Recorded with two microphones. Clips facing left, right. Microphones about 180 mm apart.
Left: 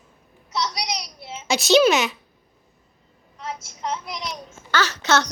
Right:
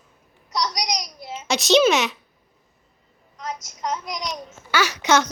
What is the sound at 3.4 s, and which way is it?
Speech, 40° right (ahead or behind).